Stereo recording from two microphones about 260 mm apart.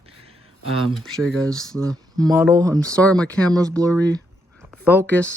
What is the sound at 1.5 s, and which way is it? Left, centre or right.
Speech, centre.